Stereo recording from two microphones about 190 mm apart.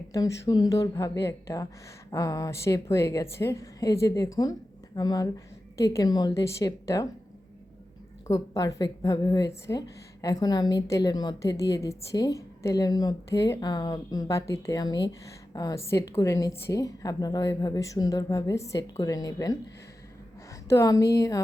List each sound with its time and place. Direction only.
0.1 s a woman's voice: 15° left (ahead or behind)
8.3 s a woman's voice: 20° left (ahead or behind)
20.7 s a woman's voice: 15° left (ahead or behind)